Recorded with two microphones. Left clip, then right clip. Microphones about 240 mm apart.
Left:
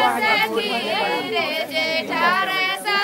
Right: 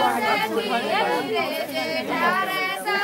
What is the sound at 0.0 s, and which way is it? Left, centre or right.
Chatter, centre.